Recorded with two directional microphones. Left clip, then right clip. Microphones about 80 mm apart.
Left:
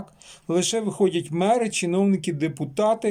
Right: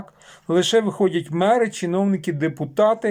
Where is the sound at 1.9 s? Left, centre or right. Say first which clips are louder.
Right 1 dB; left.